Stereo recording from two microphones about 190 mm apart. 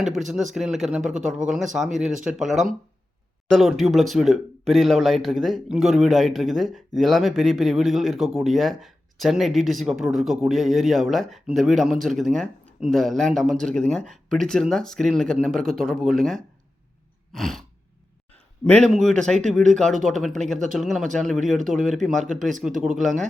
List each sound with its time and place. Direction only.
0.0 s speech: centre (ahead or behind)
18.6 s speech: 5° left (ahead or behind)
22.7 s speech: 45° right (ahead or behind)